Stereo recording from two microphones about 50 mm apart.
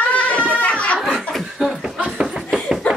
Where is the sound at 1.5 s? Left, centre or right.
Centre.